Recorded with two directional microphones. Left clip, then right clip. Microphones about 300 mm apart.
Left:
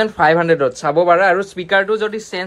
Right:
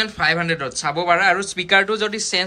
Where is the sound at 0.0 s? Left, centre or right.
Centre.